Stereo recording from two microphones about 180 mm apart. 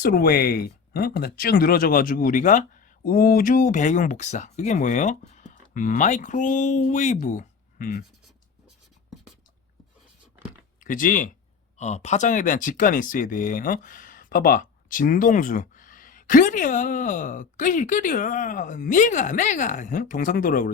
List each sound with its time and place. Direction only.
0.0 s speech: 60° left (ahead or behind)
10.8 s speech: 50° left (ahead or behind)